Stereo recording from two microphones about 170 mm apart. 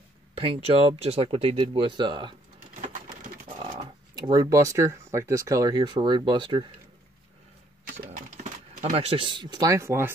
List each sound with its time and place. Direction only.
0.3 s speech: 35° right (ahead or behind)
3.4 s a sound: 30° right (ahead or behind)
4.1 s speech: 25° right (ahead or behind)
8.8 s speech: 35° right (ahead or behind); by 10.1 s 15° right (ahead or behind)